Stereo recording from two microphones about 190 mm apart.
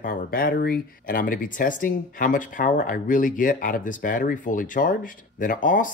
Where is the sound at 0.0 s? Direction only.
50° left (ahead or behind).